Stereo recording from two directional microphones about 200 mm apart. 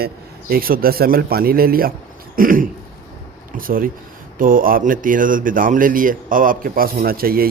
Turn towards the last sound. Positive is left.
turn(degrees=-50)  # may be behind; listen again after turning